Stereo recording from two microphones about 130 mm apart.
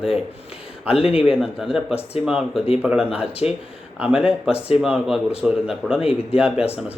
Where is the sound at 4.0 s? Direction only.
5° right (ahead or behind).